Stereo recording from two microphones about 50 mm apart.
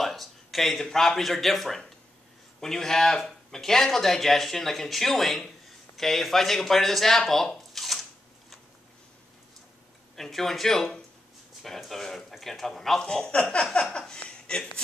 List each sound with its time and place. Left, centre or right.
0.0 s speech: centre
10.1 s speech: centre
13.0 s speech: centre